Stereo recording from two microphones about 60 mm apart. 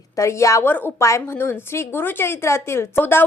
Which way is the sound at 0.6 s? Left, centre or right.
Left.